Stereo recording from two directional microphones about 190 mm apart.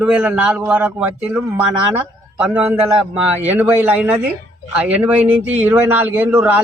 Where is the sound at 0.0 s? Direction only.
5° right (ahead or behind).